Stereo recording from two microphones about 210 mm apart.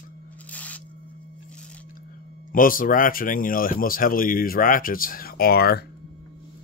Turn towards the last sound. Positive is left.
turn(degrees=50)  # may be behind; listen again after turning